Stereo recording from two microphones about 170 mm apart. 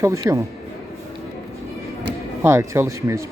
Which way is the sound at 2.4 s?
15° right (ahead or behind).